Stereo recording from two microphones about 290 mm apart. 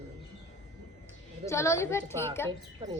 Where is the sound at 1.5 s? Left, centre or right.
Centre.